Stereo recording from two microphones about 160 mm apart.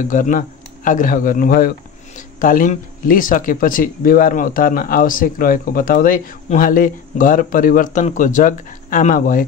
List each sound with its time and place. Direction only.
0.1 s speech: 55° left (ahead or behind)